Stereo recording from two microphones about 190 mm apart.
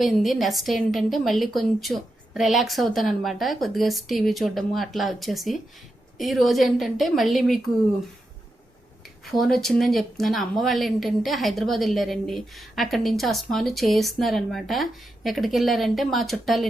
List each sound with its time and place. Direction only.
0.0 s speech: centre (ahead or behind)
9.2 s speech: centre (ahead or behind)